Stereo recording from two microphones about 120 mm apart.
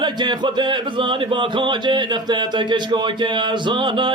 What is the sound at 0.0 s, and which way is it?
Speech, 40° right (ahead or behind).